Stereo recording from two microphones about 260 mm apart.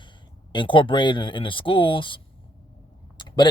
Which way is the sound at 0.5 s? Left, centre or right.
Centre.